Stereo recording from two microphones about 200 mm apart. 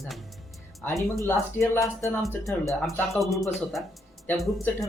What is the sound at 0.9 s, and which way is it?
Speech, 15° right (ahead or behind).